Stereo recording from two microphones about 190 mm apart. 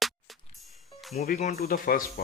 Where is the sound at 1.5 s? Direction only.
50° left (ahead or behind).